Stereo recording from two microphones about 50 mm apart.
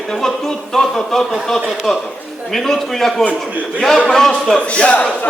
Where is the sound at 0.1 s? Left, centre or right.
Centre.